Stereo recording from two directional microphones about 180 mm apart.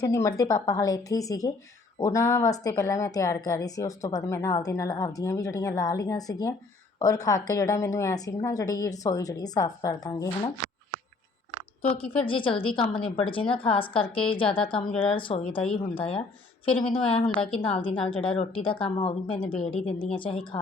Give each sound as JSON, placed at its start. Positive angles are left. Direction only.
{"t": 0.0, "sound": "a woman's voice", "side_deg": 20}
{"t": 11.8, "sound": "a woman's voice", "side_deg": 30}